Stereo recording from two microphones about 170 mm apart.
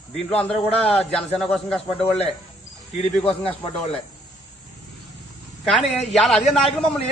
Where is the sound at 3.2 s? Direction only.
35° left (ahead or behind).